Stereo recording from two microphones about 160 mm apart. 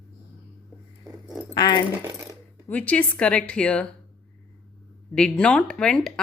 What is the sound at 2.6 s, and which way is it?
A woman's voice, 10° left (ahead or behind).